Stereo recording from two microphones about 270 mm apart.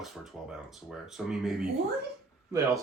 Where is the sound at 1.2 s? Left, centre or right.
Centre.